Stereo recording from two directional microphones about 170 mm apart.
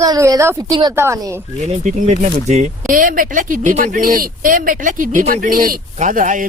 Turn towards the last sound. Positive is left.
turn(degrees=-50)  # may be behind; listen again after turning